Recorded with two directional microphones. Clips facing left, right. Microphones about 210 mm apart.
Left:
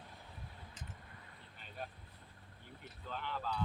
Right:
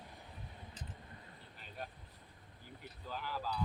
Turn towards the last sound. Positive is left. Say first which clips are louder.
# even
turn(degrees=-5)  # may be behind; listen again after turning